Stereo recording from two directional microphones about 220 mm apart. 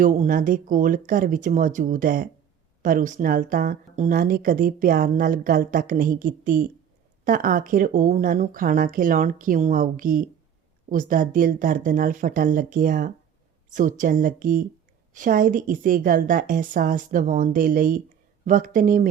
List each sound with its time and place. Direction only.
0.0 s speech: 35° right (ahead or behind)